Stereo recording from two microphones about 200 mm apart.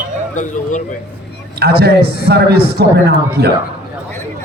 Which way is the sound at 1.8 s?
50° right (ahead or behind).